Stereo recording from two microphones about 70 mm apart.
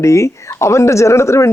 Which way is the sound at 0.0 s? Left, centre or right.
Left.